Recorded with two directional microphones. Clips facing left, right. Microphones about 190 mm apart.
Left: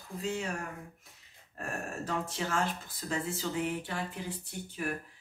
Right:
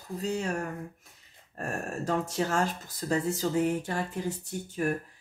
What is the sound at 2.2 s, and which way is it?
Speech, 40° right (ahead or behind).